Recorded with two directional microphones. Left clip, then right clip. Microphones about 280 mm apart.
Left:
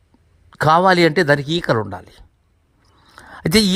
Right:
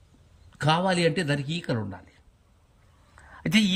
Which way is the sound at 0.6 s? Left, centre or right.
Centre.